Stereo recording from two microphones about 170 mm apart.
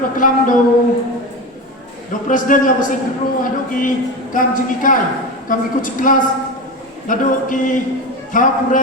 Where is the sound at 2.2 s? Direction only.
50° left (ahead or behind).